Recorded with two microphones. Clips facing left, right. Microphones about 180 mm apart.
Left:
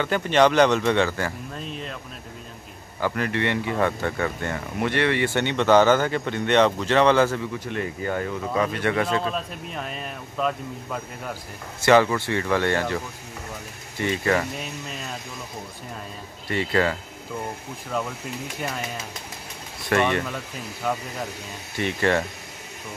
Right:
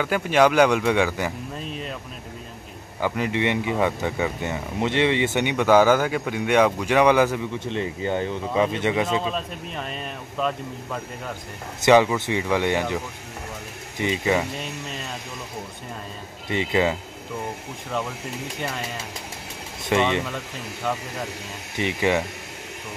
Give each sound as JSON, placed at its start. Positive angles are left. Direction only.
{"t": 0.0, "sound": "speech", "side_deg": -5}
{"t": 1.6, "sound": "speech", "side_deg": 0}
{"t": 3.0, "sound": "speech", "side_deg": -15}
{"t": 9.0, "sound": "speech", "side_deg": 0}
{"t": 11.8, "sound": "speech", "side_deg": -15}
{"t": 16.4, "sound": "speech", "side_deg": -20}
{"t": 19.8, "sound": "speech", "side_deg": -20}
{"t": 20.9, "sound": "speech", "side_deg": 5}
{"t": 21.7, "sound": "speech", "side_deg": -15}